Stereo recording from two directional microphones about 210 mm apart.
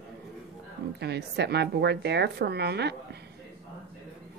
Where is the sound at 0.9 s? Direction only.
50° right (ahead or behind).